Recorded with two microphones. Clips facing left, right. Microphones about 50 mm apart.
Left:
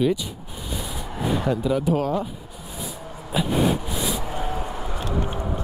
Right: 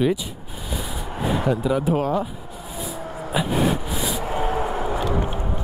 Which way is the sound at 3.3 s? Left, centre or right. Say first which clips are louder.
Even; centre.